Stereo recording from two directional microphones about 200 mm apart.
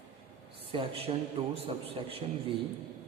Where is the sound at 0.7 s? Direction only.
30° right (ahead or behind).